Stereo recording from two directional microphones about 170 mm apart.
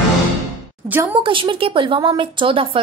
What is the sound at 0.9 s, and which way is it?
Speech, 10° right (ahead or behind).